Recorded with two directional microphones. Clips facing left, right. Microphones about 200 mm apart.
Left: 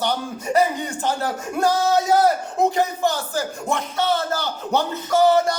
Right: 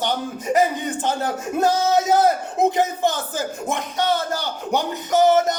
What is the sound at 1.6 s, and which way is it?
Speech, 20° right (ahead or behind).